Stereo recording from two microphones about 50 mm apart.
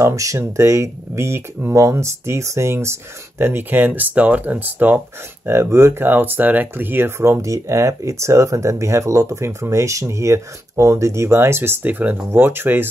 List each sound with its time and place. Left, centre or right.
0.0 s speech: right
0.5 s speech: right
1.7 s speech: right
5.6 s speech: right
5.9 s speech: right
7.2 s speech: right
11.8 s speech: right
12.3 s speech: right